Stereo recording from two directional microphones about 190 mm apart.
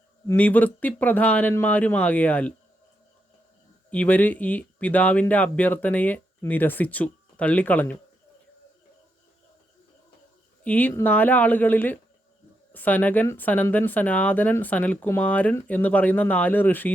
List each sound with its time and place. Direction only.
0.3 s speech: 10° left (ahead or behind)
3.8 s speech: 5° left (ahead or behind)
10.6 s speech: 10° left (ahead or behind)